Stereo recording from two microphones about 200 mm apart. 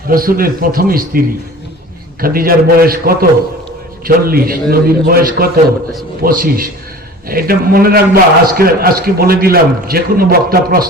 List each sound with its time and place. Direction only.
0.1 s a man's voice: 45° right (ahead or behind)
2.2 s a man's voice: 45° right (ahead or behind)